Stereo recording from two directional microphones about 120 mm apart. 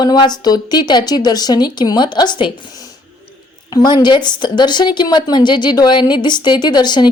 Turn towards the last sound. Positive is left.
turn(degrees=35)  # may be behind; listen again after turning